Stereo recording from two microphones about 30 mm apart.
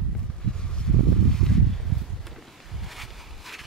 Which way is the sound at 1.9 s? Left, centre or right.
Centre.